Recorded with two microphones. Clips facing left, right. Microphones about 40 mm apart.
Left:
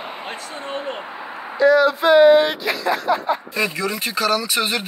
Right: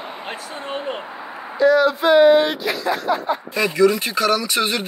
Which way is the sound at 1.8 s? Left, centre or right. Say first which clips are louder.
Left 1 dB; left.